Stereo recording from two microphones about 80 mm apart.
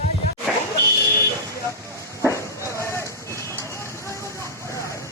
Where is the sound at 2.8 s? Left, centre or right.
Left.